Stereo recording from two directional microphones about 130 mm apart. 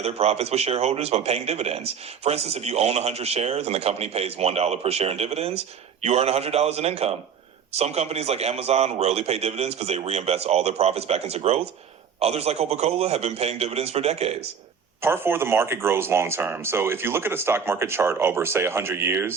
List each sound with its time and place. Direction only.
0.0 s a man's voice: 50° right (ahead or behind)
15.0 s speech: 20° right (ahead or behind)